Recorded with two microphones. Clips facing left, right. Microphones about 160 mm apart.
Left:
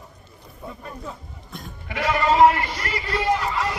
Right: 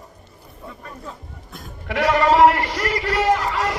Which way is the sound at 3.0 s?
90° right.